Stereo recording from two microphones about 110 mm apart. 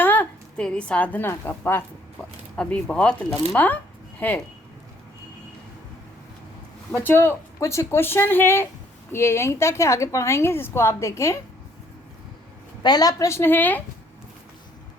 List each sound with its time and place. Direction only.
0.0 s a sound: 15° left (ahead or behind)
0.6 s a woman's voice: 10° left (ahead or behind)
2.6 s a woman's voice: 10° left (ahead or behind)
6.9 s a woman's voice: 20° left (ahead or behind)
12.8 s a woman's voice: 35° left (ahead or behind); by 13.8 s 15° left (ahead or behind)